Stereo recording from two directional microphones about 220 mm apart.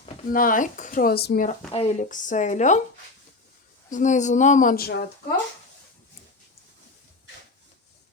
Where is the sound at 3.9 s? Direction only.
35° left (ahead or behind).